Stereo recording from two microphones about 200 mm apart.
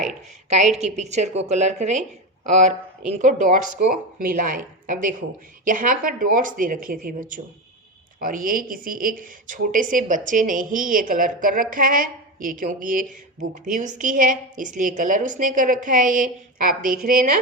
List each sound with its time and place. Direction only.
0.8 s a woman's voice: 35° right (ahead or behind)